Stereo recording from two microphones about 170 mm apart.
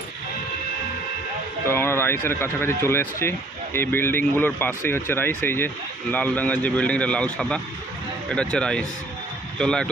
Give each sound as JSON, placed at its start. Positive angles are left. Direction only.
{"t": 1.7, "sound": "speech", "side_deg": 15}